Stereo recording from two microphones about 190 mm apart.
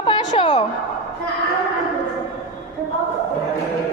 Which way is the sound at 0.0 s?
25° left (ahead or behind).